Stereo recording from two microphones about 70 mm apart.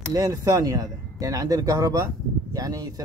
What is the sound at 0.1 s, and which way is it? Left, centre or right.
Speech, right.